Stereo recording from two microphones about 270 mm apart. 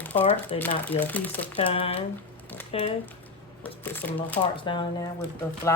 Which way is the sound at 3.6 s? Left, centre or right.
Centre.